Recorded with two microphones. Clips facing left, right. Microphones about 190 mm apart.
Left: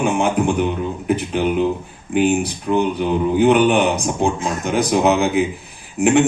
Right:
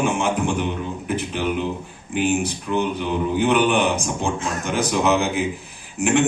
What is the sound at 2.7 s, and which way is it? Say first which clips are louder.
A man's voice: left 6 dB; 55° left (ahead or behind).